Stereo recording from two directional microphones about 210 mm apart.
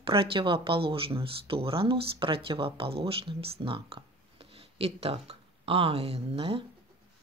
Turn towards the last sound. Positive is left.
turn(degrees=-25)  # may be behind; listen again after turning